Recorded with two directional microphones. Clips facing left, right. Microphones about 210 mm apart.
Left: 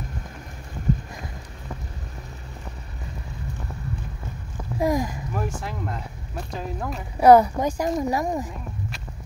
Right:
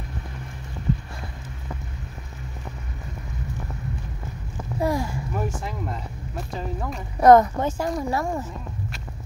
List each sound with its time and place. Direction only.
0.9 s clip-clop: 45° left (ahead or behind)
4.7 s a sound: 15° left (ahead or behind)
5.6 s a woman's voice: centre (ahead or behind)